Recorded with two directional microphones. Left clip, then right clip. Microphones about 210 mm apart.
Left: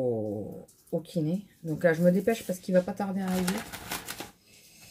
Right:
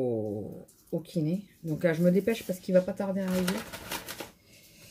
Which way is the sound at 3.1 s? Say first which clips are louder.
Right 1 dB; 20° left (ahead or behind).